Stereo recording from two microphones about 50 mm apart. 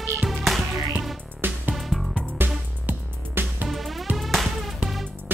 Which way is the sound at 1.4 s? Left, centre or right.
Right.